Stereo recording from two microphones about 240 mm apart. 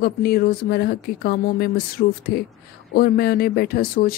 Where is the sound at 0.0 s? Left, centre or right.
Left.